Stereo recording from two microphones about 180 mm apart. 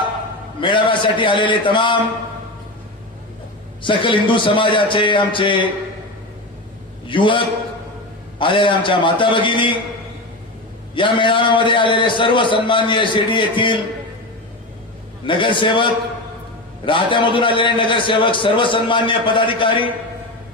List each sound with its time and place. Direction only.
0.6 s a man's voice: 25° left (ahead or behind)
3.8 s a man's voice: 25° left (ahead or behind)
7.1 s a man's voice: 30° left (ahead or behind)
10.9 s a man's voice: 25° left (ahead or behind)
15.3 s a man's voice: 30° left (ahead or behind)